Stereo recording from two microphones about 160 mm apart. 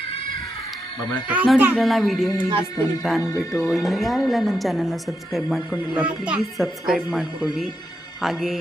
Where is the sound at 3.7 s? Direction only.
Centre (ahead or behind).